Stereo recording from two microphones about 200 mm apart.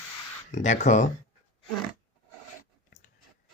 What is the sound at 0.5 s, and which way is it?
Speech, 35° left (ahead or behind).